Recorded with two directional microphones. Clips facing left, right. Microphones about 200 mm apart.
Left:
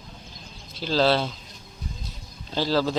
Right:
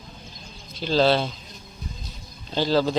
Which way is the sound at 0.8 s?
5° left (ahead or behind).